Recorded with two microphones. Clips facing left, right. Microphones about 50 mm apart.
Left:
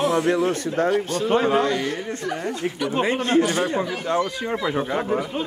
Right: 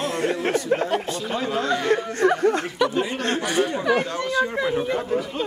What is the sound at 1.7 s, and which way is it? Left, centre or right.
Speech, right.